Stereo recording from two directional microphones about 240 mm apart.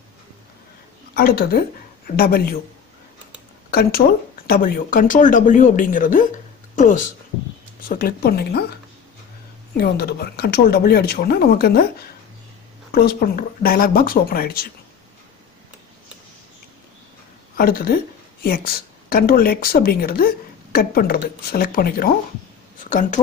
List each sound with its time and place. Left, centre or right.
1.1 s speech: left
4.5 s speech: left
9.8 s speech: left
17.6 s speech: left
19.0 s speech: left